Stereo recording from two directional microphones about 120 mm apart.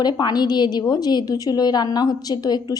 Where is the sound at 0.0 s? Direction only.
35° left (ahead or behind).